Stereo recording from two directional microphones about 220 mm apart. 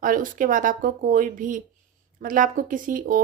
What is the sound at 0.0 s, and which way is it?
Speech, 40° right (ahead or behind).